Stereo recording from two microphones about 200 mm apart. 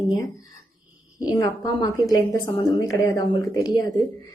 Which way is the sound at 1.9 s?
15° left (ahead or behind).